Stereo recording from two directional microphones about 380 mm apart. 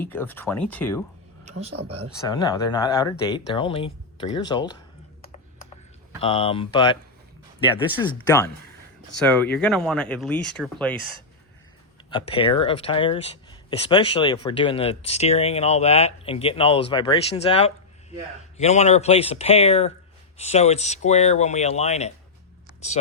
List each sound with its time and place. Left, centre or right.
0.0 s speech: centre
1.5 s speech: right
2.2 s speech: centre
6.1 s speech: centre
12.1 s speech: centre